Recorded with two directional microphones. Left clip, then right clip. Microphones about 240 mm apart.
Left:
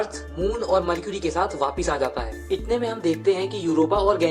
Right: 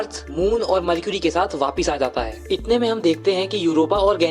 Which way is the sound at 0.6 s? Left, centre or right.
Right.